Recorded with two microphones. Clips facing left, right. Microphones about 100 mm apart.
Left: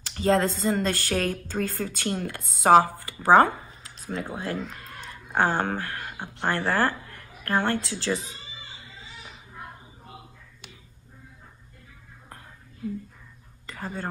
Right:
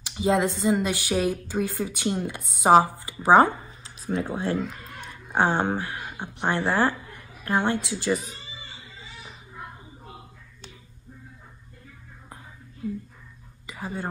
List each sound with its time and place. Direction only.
0.0 s speech: 15° right (ahead or behind)
13.7 s speech: 10° right (ahead or behind)